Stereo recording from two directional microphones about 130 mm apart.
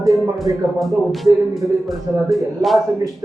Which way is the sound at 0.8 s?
Centre (ahead or behind).